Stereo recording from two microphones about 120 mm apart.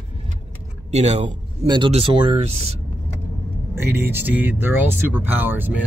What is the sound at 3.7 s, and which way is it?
Speech, 20° right (ahead or behind).